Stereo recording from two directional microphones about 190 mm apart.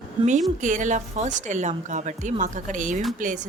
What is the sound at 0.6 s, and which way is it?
Speech, 40° right (ahead or behind).